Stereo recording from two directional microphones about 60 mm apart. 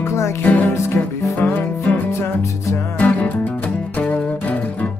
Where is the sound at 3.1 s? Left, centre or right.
Left.